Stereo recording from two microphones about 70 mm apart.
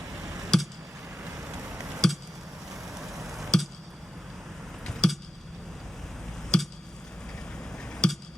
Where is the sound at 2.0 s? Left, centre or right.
Centre.